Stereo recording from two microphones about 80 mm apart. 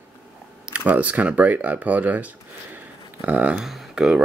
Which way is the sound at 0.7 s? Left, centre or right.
Centre.